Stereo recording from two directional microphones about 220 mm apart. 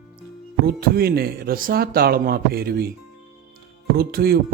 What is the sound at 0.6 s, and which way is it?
Speech, 45° right (ahead or behind).